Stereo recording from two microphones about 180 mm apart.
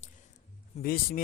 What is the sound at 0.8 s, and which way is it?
Speech, 55° left (ahead or behind).